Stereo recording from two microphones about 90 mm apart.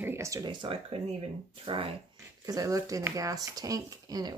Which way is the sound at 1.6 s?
90° right.